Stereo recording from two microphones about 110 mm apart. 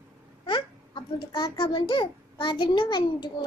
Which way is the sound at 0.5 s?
45° left (ahead or behind).